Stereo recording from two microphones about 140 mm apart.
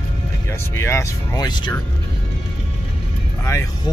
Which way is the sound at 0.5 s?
20° left (ahead or behind).